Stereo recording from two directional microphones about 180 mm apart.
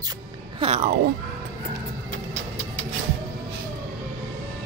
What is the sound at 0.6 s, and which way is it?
Speech, 35° right (ahead or behind).